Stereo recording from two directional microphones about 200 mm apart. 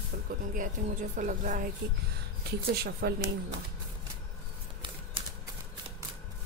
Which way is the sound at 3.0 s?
55° right (ahead or behind).